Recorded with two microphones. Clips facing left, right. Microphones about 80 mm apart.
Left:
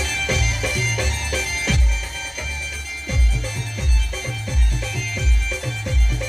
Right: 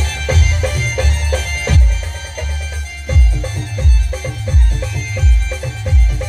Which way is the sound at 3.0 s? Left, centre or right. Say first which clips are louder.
Right 6 dB; right.